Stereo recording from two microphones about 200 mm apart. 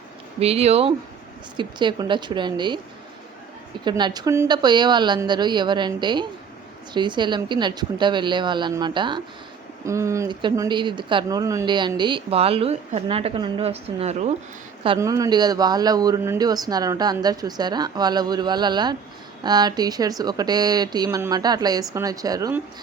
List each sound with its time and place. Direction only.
0.3 s speech: 30° right (ahead or behind)
3.8 s speech: 20° right (ahead or behind)
14.9 s speech: 15° right (ahead or behind)